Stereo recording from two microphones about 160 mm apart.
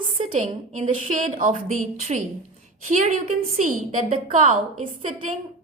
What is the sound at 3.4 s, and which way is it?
Speech, 55° right (ahead or behind).